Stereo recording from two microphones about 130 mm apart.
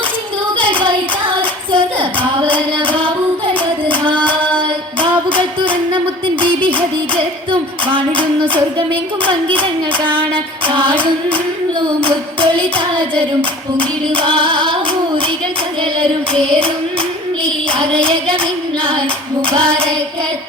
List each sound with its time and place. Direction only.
0.6 s a sound: 40° right (ahead or behind)
1.7 s child singing: 40° right (ahead or behind)
7.9 s music: 40° right (ahead or behind)
9.2 s child singing: 40° right (ahead or behind)
14.1 s female singing: 40° right (ahead or behind)
16.5 s singing: 45° right (ahead or behind)
17.4 s clapping: 40° right (ahead or behind)
19.5 s child singing: 40° right (ahead or behind)